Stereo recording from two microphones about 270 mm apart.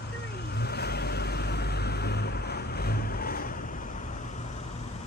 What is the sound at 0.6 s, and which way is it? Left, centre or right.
Vehicle, left.